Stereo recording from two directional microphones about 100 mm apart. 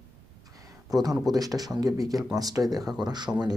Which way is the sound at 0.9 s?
40° right (ahead or behind).